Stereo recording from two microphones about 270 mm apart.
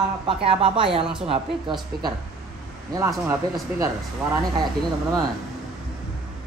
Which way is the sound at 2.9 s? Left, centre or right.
Centre.